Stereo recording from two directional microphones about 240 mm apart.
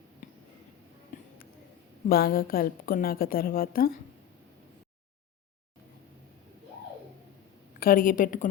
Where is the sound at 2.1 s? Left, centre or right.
Left.